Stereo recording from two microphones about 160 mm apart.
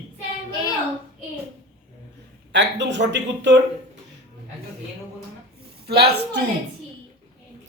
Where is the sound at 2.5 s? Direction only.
90° right.